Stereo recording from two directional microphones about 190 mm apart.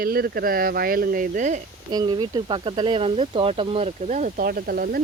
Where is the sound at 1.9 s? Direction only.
20° right (ahead or behind).